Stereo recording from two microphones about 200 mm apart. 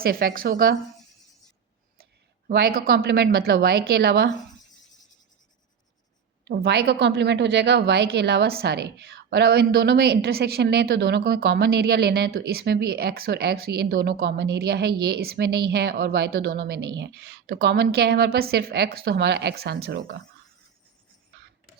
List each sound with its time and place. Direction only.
0.0 s a woman's voice: 50° right (ahead or behind)
2.5 s a woman's voice: 50° right (ahead or behind)
6.4 s a woman's voice: 55° right (ahead or behind)